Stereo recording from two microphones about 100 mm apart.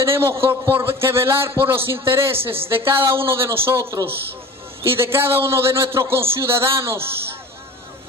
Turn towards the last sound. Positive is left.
turn(degrees=-25)  # may be behind; listen again after turning